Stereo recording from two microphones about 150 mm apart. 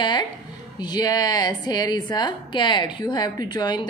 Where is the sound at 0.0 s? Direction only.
30° left (ahead or behind).